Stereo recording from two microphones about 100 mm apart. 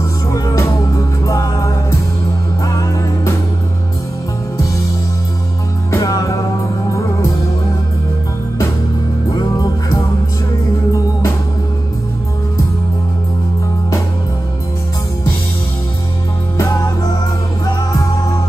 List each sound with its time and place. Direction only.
0.3 s music: 35° left (ahead or behind)
5.9 s music: 35° left (ahead or behind)
9.3 s music: 40° left (ahead or behind)
16.5 s music: 35° left (ahead or behind)